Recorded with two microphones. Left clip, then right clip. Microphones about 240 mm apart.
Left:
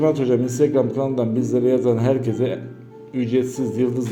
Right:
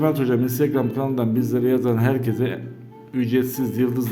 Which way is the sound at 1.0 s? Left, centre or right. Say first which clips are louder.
Left 1 dB; right.